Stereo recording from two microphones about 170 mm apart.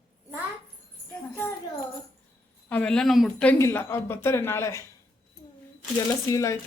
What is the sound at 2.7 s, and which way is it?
Speech, 5° left (ahead or behind).